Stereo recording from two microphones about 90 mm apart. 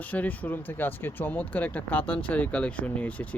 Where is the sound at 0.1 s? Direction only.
20° left (ahead or behind).